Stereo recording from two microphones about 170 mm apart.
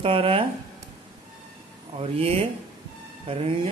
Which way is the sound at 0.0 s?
35° right (ahead or behind).